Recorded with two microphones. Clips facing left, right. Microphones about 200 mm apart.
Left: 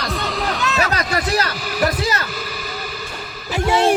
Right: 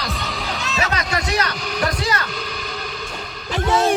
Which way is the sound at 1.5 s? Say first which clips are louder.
Left 3 dB; 5° left (ahead or behind).